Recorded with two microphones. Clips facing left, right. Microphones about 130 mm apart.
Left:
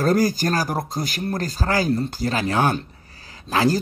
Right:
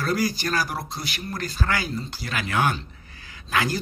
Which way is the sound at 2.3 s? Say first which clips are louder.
Left 2 dB; 30° left (ahead or behind).